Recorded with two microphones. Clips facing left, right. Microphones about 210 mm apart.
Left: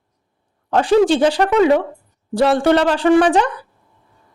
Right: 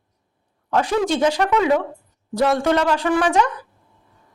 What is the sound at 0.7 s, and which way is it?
Speech, 30° left (ahead or behind).